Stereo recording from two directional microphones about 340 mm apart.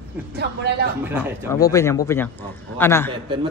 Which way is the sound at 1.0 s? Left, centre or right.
Centre.